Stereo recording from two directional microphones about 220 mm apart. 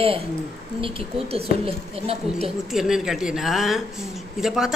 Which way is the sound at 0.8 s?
25° right (ahead or behind).